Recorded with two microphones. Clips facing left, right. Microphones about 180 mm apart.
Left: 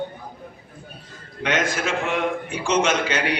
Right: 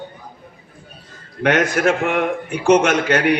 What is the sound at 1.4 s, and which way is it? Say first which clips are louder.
A man's voice: right 7 dB; 60° right (ahead or behind).